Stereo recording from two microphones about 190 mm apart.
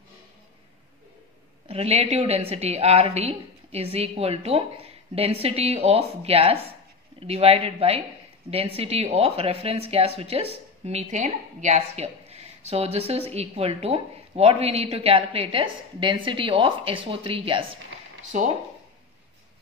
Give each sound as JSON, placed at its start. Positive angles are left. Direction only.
{"t": 1.7, "sound": "speech", "side_deg": -30}
{"t": 18.3, "sound": "speech", "side_deg": -40}